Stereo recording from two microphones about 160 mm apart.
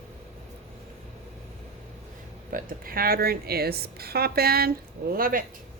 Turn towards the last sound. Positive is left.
turn(degrees=-60)  # may be behind; listen again after turning